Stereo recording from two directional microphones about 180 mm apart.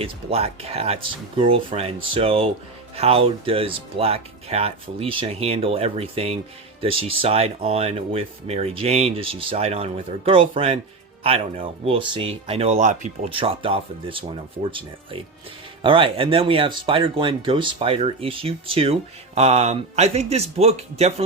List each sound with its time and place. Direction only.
0.0 s speech: 35° right (ahead or behind)
13.3 s speech: 30° right (ahead or behind)